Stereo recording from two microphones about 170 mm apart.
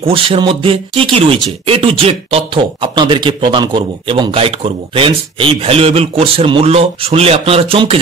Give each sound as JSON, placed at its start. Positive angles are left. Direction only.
{"t": 0.0, "sound": "speech", "side_deg": -35}